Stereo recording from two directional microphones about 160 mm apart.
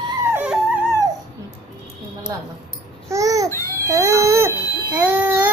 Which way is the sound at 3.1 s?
20° right (ahead or behind).